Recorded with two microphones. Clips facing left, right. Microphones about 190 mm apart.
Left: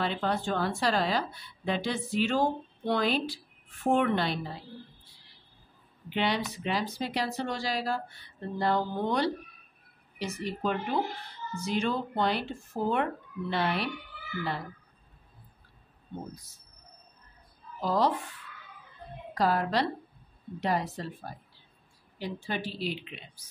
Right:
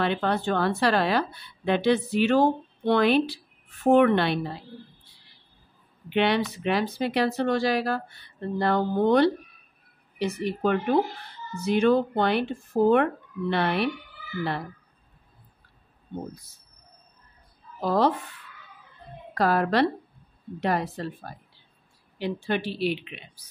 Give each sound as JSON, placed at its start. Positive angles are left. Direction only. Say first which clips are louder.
{"t": 0.0, "sound": "a woman's voice", "louder": "right 5 dB", "side_deg": -65}
{"t": 6.0, "sound": "a woman's voice", "louder": "right 6 dB", "side_deg": -65}
{"t": 17.7, "sound": "speech", "louder": "right 4 dB", "side_deg": -60}
{"t": 19.3, "sound": "a woman's voice", "louder": "right 4 dB", "side_deg": -60}
{"t": 22.2, "sound": "speech", "louder": "right 7 dB", "side_deg": -65}